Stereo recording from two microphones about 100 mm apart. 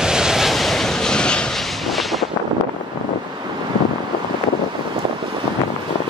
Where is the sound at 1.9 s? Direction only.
Centre (ahead or behind).